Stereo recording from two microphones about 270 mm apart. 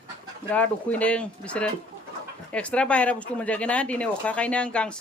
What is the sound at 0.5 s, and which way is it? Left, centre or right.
Speech, centre.